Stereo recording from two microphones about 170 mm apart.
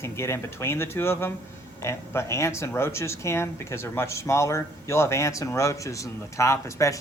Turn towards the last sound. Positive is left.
turn(degrees=15)  # may be behind; listen again after turning